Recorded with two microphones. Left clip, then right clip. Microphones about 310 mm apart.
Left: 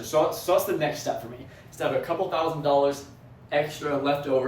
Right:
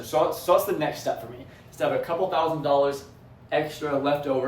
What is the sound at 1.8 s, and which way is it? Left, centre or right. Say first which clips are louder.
Speech: right 1 dB; centre.